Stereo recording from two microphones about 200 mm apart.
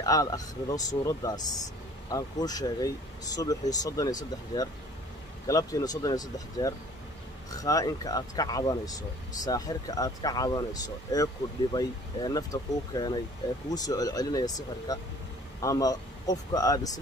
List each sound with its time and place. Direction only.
0.0 s a man's voice: 15° left (ahead or behind)